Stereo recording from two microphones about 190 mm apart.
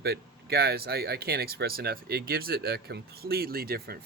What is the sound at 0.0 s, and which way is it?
Speech, 55° right (ahead or behind).